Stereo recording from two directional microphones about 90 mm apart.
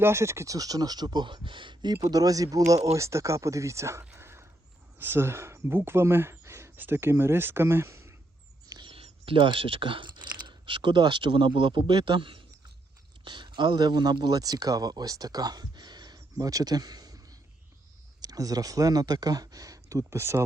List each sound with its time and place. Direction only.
0.0 s speech: 30° right (ahead or behind)
4.1 s a sound: 30° right (ahead or behind)
4.9 s speech: 25° right (ahead or behind)
8.8 s speech: 85° right; by 20.4 s 30° right (ahead or behind)